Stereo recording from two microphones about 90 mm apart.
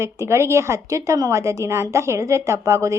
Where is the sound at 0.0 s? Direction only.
30° right (ahead or behind).